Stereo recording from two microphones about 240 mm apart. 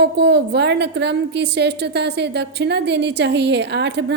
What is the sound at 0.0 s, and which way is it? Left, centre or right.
A woman's voice, right.